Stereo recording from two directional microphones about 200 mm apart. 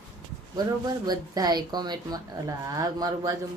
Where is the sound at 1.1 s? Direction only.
20° right (ahead or behind).